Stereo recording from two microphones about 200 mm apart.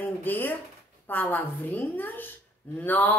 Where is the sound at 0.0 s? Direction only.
10° left (ahead or behind).